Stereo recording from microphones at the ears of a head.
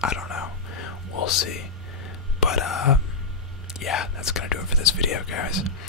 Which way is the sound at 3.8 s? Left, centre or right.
Left.